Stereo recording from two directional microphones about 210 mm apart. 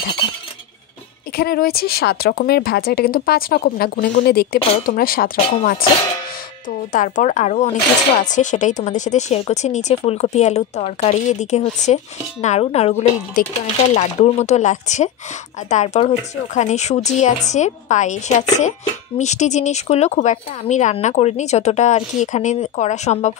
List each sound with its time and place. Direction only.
1.3 s speech: 45° left (ahead or behind)
6.9 s speech: 40° left (ahead or behind)